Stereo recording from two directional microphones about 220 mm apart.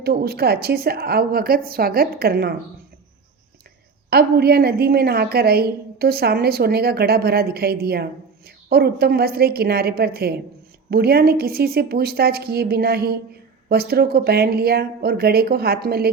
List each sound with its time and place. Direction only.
0.0 s a woman's voice: 45° right (ahead or behind)
4.1 s a woman's voice: 45° right (ahead or behind)